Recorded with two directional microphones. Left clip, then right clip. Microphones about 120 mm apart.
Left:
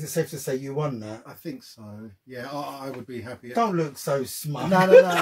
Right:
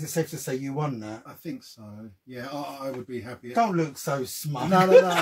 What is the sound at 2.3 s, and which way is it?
Speech, 30° left (ahead or behind).